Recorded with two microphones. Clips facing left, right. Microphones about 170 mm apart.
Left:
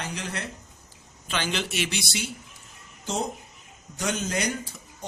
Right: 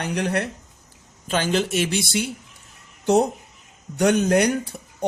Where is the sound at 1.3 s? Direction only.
45° right (ahead or behind).